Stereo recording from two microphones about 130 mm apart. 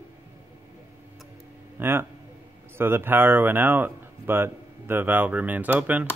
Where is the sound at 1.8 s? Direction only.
15° right (ahead or behind).